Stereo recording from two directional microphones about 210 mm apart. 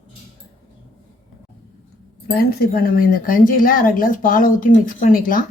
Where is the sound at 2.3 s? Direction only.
45° left (ahead or behind).